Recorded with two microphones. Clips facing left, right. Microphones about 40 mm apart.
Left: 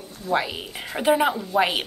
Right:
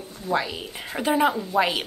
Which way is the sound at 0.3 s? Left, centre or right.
Left.